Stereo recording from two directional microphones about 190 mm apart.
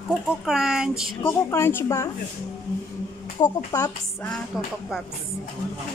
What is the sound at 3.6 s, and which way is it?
Speech, 20° left (ahead or behind).